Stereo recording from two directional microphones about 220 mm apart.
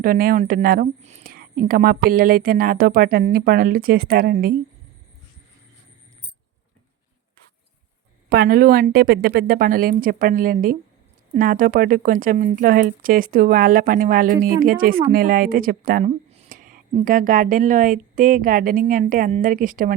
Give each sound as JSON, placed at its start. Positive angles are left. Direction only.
{"t": 0.0, "sound": "speech", "side_deg": -40}
{"t": 8.3, "sound": "speech", "side_deg": -45}